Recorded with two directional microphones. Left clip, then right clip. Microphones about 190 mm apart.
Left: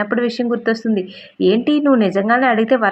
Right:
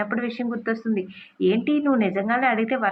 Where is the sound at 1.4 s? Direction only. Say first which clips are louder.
Left 7 dB; 50° left (ahead or behind).